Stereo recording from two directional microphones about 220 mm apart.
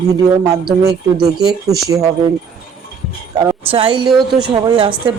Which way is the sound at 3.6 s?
25° right (ahead or behind).